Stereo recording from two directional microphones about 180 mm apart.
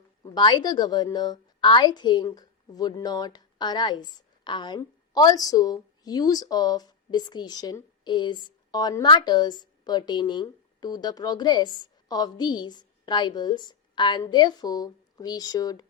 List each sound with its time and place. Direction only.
0.2 s a woman's voice: 25° left (ahead or behind)